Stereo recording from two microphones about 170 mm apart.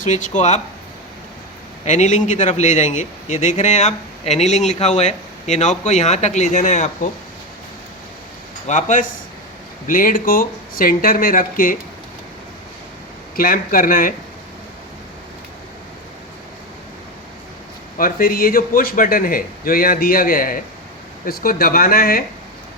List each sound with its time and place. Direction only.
0.0 s a man's voice: 45° left (ahead or behind)
1.8 s a man's voice: 45° left (ahead or behind)
8.6 s a man's voice: 45° left (ahead or behind)
13.3 s a man's voice: 55° left (ahead or behind)
17.9 s a man's voice: 55° left (ahead or behind)